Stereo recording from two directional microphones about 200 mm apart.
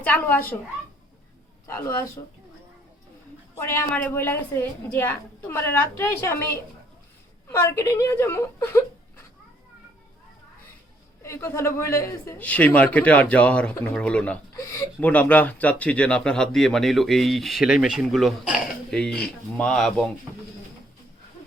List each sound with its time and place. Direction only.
0.0 s a man's voice: 10° left (ahead or behind)
1.6 s a sound: 15° left (ahead or behind)
2.2 s a woman's voice: 20° left (ahead or behind)
3.9 s a man's voice: 10° left (ahead or behind)
11.2 s a man's voice: 15° left (ahead or behind)